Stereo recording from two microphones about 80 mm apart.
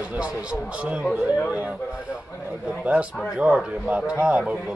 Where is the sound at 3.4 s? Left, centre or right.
Centre.